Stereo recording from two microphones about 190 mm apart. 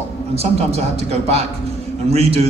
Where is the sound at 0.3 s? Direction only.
35° right (ahead or behind).